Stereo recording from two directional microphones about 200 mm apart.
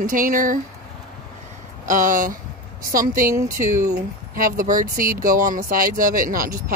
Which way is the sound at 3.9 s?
45° right (ahead or behind).